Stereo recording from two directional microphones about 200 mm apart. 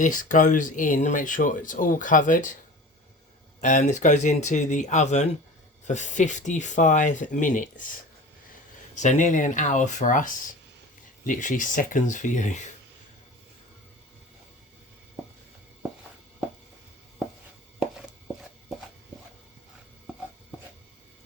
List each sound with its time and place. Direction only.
0.0 s speech: 40° left (ahead or behind)
3.6 s speech: 40° left (ahead or behind)
9.0 s speech: 40° left (ahead or behind)